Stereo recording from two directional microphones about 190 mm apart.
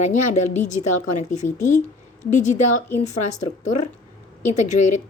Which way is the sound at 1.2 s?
40° left (ahead or behind).